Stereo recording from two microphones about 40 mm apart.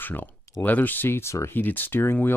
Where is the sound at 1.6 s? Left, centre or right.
Left.